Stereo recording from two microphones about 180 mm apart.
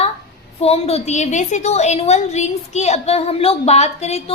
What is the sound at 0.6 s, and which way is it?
A woman's voice, 35° left (ahead or behind).